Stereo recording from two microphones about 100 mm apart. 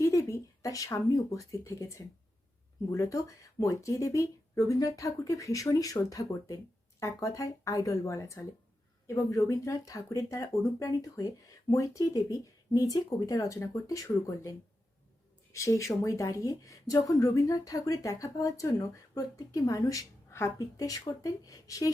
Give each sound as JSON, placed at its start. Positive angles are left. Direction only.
{"t": 0.0, "sound": "speech", "side_deg": 30}
{"t": 15.5, "sound": "speech", "side_deg": 30}